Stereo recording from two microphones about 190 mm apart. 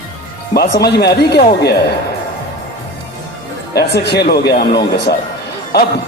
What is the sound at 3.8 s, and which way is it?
Speech, 60° left (ahead or behind).